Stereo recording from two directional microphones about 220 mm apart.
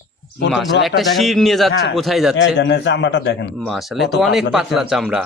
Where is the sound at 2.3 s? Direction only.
55° left (ahead or behind).